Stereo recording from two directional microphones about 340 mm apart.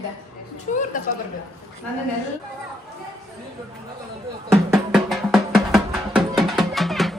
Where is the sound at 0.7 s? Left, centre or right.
Left.